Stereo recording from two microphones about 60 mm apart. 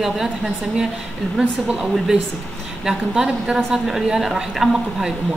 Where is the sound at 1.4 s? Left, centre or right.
Right.